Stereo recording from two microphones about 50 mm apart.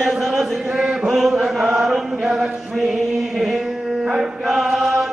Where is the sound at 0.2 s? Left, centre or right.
Centre.